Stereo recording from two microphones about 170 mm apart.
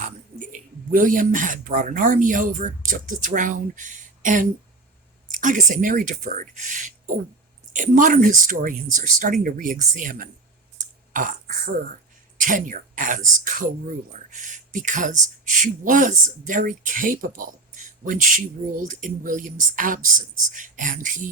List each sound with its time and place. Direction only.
0.9 s speech: 50° right (ahead or behind)